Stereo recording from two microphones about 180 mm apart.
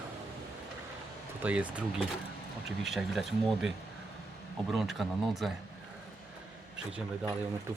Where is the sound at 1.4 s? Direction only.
10° right (ahead or behind).